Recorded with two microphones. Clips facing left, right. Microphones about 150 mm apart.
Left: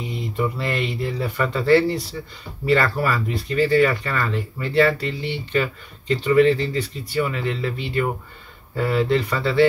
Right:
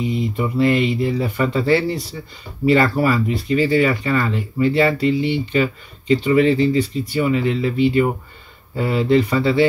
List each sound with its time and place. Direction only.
0.4 s speech: 15° right (ahead or behind)